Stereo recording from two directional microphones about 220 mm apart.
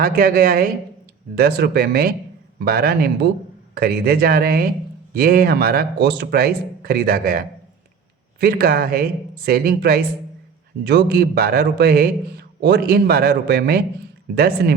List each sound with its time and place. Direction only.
0.0 s a woman's voice: 40° right (ahead or behind)